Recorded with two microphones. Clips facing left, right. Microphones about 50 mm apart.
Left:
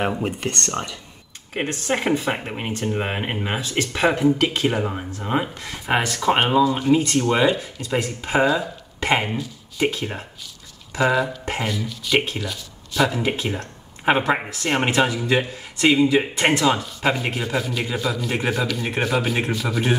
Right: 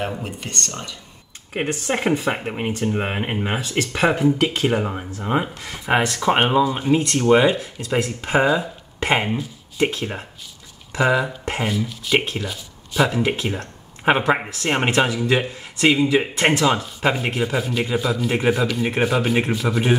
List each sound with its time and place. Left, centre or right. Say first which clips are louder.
0.4 s speech: left 4 dB; left
1.5 s speech: right 1 dB; centre
6.6 s speech: left 1 dB; centre
9.9 s speech: right 1 dB; centre
13.4 s speech: right 1 dB; centre
16.3 s speech: right 1 dB; centre
16.6 s speech: right 1 dB; centre